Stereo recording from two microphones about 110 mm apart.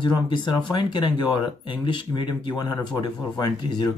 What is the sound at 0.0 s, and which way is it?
Speech, 45° left (ahead or behind).